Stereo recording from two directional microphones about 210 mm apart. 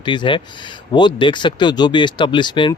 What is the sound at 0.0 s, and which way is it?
A man's voice, 20° left (ahead or behind).